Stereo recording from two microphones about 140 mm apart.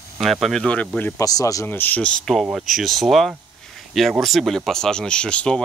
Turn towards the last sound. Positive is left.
turn(degrees=5)  # may be behind; listen again after turning